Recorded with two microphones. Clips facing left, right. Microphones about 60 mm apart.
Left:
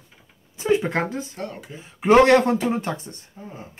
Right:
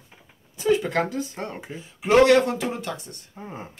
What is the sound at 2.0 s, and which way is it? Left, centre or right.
Speech, left.